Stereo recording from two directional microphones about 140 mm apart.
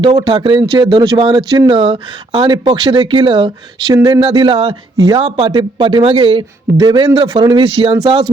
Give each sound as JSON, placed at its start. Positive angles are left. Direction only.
{"t": 0.0, "sound": "speech", "side_deg": -30}